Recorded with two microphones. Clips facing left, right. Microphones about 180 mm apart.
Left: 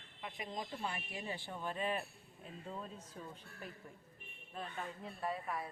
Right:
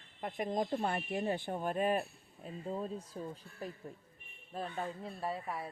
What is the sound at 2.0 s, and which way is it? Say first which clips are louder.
Speech: right 6 dB; 35° right (ahead or behind).